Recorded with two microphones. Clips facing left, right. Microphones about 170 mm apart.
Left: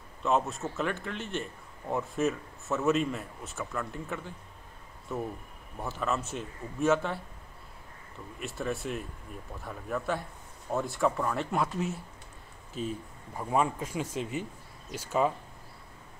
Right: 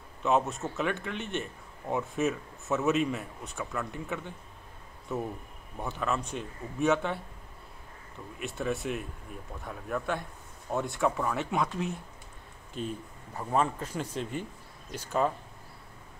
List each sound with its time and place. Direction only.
0.2 s a man's voice: centre (ahead or behind)
8.4 s a man's voice: centre (ahead or behind)